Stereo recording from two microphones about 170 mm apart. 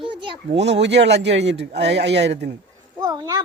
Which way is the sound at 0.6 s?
90° right.